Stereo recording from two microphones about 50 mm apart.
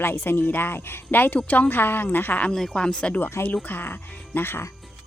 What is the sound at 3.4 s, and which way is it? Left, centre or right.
Speech, left.